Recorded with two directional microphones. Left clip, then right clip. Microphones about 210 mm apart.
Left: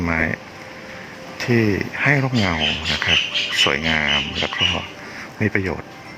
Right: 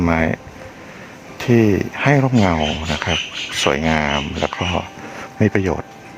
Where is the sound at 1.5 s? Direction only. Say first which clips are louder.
Right 4 dB; 20° right (ahead or behind).